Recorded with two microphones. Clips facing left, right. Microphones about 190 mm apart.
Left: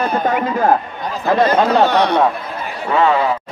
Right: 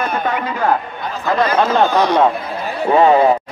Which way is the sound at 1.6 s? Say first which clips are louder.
Left 1 dB; 65° left (ahead or behind).